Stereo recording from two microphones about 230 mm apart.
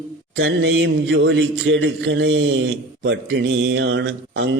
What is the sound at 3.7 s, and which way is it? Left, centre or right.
Speech, right.